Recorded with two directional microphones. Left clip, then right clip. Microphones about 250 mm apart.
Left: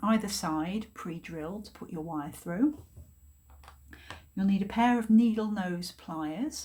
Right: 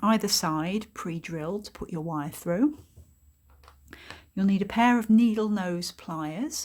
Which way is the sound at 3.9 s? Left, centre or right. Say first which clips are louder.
Right 4 dB; right.